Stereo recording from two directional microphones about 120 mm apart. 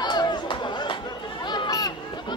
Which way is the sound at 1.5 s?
35° left (ahead or behind).